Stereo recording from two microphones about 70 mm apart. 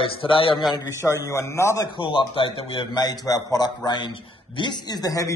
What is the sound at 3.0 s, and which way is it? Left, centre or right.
A man's voice, left.